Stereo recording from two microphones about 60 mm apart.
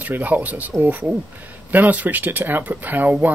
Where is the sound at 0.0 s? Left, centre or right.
Right.